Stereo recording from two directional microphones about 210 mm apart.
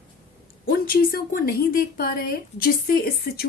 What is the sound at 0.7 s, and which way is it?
A woman's voice, 45° left (ahead or behind).